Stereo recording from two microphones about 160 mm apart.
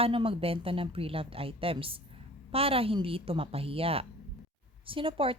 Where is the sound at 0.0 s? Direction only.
35° right (ahead or behind).